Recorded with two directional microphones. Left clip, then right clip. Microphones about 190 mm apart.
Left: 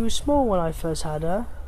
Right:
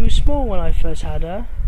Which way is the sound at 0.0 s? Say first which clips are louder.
Left 2 dB; 20° left (ahead or behind).